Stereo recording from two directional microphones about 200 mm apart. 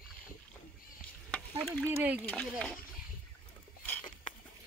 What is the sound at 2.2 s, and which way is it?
Speech, 5° left (ahead or behind).